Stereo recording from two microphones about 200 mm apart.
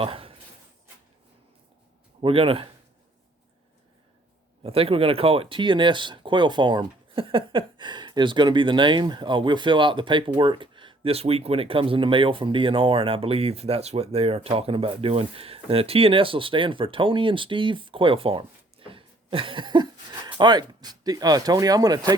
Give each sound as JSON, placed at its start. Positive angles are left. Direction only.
{"t": 0.0, "sound": "speech", "side_deg": -30}
{"t": 2.2, "sound": "speech", "side_deg": -30}
{"t": 4.6, "sound": "speech", "side_deg": -30}